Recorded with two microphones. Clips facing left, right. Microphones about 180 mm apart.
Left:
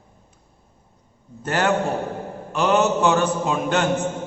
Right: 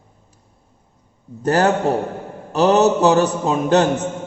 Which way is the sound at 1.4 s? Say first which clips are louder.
Right 5 dB; 40° right (ahead or behind).